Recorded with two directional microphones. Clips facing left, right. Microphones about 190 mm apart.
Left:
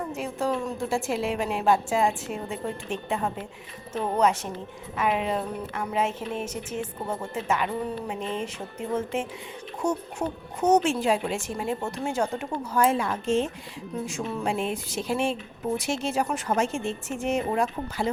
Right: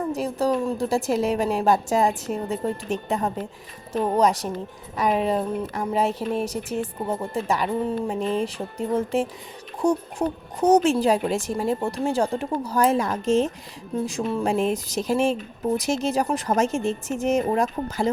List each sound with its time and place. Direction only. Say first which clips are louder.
0.1 s speech: right 5 dB; 35° right (ahead or behind)